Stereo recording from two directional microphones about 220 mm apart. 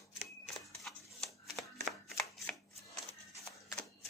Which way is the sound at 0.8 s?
Centre (ahead or behind).